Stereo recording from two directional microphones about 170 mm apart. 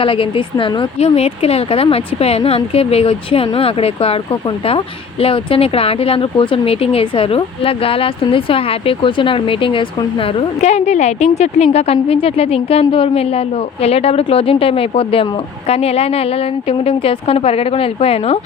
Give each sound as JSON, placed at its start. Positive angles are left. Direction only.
{"t": 0.0, "sound": "speech", "side_deg": 30}